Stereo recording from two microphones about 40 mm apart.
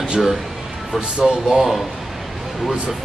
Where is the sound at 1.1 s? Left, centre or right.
Centre.